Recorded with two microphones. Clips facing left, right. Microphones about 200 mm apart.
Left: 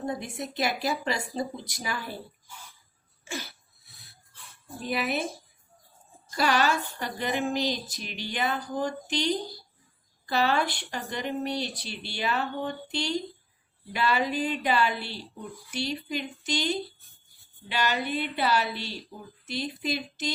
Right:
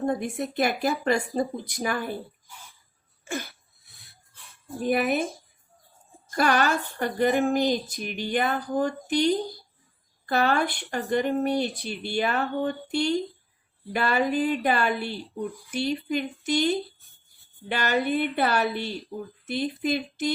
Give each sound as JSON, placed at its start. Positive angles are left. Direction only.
{"t": 0.0, "sound": "a woman's voice", "side_deg": -55}
{"t": 3.2, "sound": "cough", "side_deg": -55}
{"t": 3.8, "sound": "a sound", "side_deg": 0}
{"t": 4.8, "sound": "speech", "side_deg": -50}
{"t": 6.3, "sound": "speech", "side_deg": -50}